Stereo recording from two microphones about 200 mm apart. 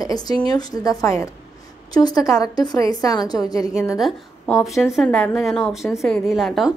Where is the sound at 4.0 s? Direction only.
Centre (ahead or behind).